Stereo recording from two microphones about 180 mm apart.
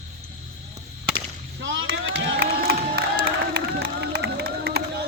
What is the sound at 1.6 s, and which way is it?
Rowboat, 90° right.